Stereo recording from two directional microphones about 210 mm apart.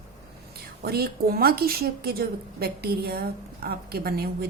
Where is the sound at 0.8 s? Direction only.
45° right (ahead or behind).